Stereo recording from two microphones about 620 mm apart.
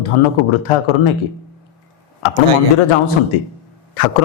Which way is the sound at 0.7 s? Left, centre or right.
Left.